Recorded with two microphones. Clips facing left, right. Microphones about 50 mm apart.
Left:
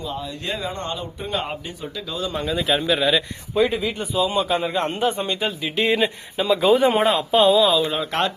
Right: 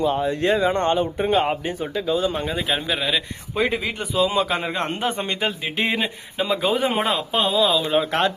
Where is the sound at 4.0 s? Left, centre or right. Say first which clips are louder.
Right 2 dB; right.